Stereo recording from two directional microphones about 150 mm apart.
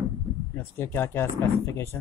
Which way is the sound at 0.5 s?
15° left (ahead or behind).